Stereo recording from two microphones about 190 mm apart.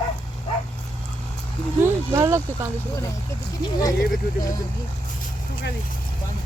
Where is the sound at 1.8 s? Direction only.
15° right (ahead or behind).